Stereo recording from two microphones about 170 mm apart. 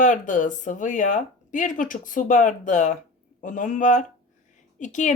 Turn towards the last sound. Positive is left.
turn(degrees=45)  # may be behind; listen again after turning